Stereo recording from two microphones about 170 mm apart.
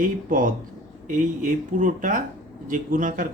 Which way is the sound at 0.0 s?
55° right (ahead or behind).